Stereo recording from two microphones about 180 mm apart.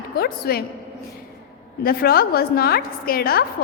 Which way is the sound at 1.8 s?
55° left (ahead or behind).